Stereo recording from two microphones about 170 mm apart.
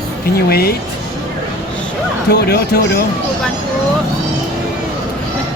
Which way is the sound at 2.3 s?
70° left (ahead or behind).